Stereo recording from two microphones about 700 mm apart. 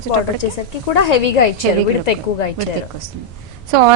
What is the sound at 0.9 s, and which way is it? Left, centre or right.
Speech, left.